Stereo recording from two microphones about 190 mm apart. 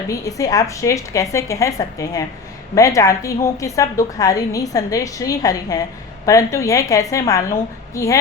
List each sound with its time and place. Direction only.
0.1 s a woman's voice: 15° left (ahead or behind)